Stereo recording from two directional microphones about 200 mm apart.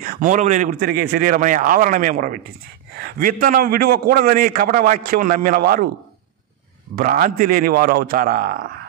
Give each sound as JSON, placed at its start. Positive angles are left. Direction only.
{"t": 0.0, "sound": "a man's voice", "side_deg": -40}
{"t": 0.7, "sound": "a man's voice", "side_deg": -50}
{"t": 7.0, "sound": "a man's voice", "side_deg": -45}